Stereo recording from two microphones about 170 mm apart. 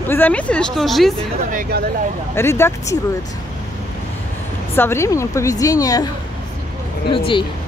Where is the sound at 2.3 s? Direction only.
15° left (ahead or behind).